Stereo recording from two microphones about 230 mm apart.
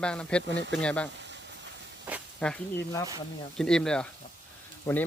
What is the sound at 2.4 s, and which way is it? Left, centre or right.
Speech, centre.